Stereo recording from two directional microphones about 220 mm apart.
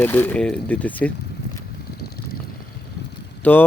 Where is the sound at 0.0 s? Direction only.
10° left (ahead or behind).